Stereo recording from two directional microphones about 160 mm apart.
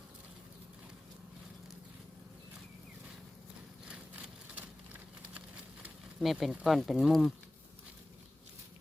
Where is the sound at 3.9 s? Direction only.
10° right (ahead or behind).